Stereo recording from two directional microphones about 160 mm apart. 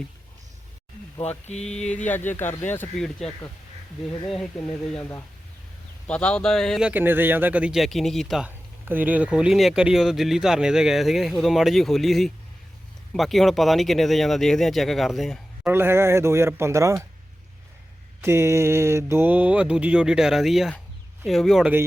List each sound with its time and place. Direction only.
1.5 s speech: 5° left (ahead or behind)
8.4 s speech: 10° right (ahead or behind)
15.6 s mantra: 15° right (ahead or behind)
18.2 s mantra: 15° right (ahead or behind)
21.2 s speech: centre (ahead or behind)